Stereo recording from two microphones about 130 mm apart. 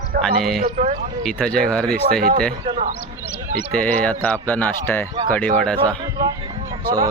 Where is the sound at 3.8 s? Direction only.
10° left (ahead or behind).